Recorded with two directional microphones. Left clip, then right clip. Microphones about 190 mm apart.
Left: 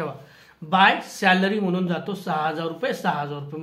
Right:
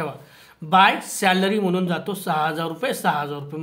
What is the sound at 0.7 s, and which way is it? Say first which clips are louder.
Speech: right 2 dB; 25° right (ahead or behind).